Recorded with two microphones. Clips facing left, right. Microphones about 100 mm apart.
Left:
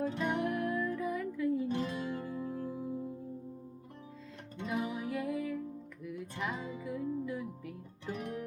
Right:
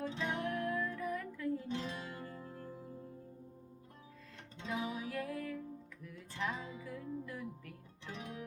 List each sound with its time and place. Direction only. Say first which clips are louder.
0.1 s music: left 5 dB; 55° left (ahead or behind)
0.4 s music: left 4 dB; 15° left (ahead or behind)
1.6 s music: left 6 dB; 50° left (ahead or behind)
2.2 s music: left 9 dB; 10° left (ahead or behind)
4.6 s music: left 4 dB; 10° left (ahead or behind)
8.0 s music: left 7 dB; 50° left (ahead or behind)